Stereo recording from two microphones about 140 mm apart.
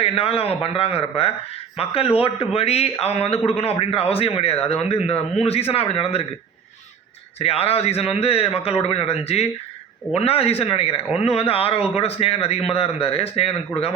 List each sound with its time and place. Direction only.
0.0 s a man's voice: 45° left (ahead or behind)
7.3 s a man's voice: 45° left (ahead or behind)